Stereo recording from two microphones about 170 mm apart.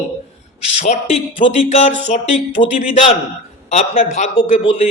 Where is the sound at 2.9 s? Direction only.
40° left (ahead or behind).